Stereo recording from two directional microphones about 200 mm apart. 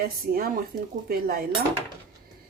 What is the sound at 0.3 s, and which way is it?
Speech, 45° right (ahead or behind).